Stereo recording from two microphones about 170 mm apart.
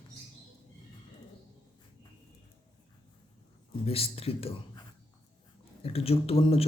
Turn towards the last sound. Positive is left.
turn(degrees=35)  # may be behind; listen again after turning